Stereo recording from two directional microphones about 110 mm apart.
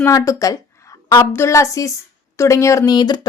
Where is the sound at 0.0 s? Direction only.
30° left (ahead or behind).